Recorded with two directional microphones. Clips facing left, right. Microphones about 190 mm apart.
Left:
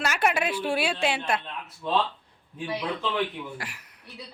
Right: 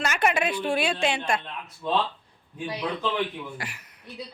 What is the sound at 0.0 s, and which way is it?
A woman's voice, 5° left (ahead or behind).